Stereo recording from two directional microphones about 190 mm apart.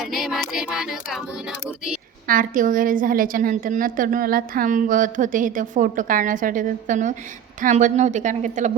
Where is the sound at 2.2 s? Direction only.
45° right (ahead or behind).